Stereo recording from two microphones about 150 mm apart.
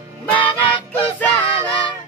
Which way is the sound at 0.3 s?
35° left (ahead or behind).